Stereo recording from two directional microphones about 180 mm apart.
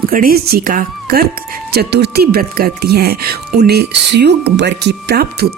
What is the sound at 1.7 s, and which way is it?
Speech, 65° right (ahead or behind).